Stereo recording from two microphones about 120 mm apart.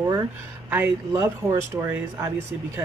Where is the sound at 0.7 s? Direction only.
20° right (ahead or behind).